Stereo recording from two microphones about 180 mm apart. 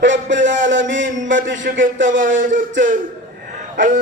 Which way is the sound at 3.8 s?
90° right.